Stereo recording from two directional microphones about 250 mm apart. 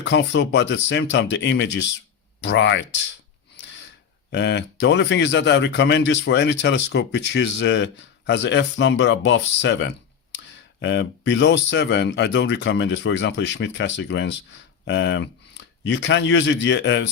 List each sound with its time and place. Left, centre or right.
0.0 s speech: left
4.3 s speech: left